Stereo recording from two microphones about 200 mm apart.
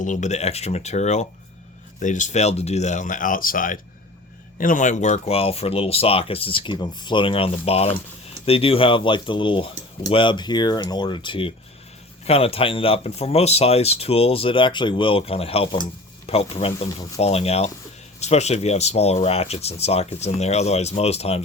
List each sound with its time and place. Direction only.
0.0 s speech: 35° left (ahead or behind)
16.7 s speech: 15° left (ahead or behind)
17.2 s speech: 30° left (ahead or behind)